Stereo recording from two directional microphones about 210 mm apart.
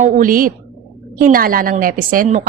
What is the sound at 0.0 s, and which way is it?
A woman's voice, 40° right (ahead or behind).